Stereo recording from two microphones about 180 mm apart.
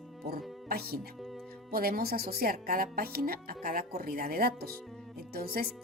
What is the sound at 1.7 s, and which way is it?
Speech, 55° right (ahead or behind).